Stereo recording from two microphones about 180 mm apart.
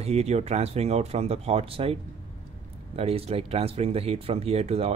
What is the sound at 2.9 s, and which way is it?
Speech, 35° right (ahead or behind).